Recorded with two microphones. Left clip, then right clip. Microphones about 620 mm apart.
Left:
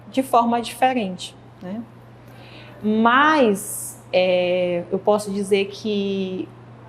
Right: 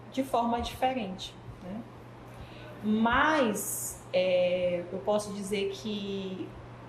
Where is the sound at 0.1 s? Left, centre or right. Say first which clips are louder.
Left 11 dB; left.